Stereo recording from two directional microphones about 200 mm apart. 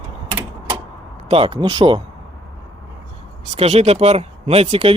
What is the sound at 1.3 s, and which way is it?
Speech, 25° right (ahead or behind).